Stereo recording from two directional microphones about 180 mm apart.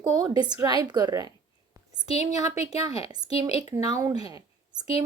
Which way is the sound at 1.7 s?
25° right (ahead or behind).